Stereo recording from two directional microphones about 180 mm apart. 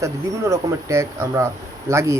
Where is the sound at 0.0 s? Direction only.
15° right (ahead or behind).